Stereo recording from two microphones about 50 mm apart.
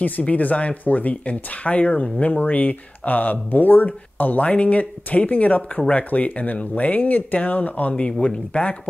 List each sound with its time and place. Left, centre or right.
0.2 s speech: left
7.9 s speech: centre